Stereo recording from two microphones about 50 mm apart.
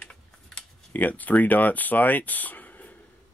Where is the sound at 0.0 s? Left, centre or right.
Centre.